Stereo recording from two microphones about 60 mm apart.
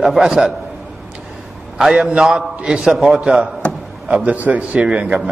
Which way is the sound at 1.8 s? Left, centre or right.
Centre.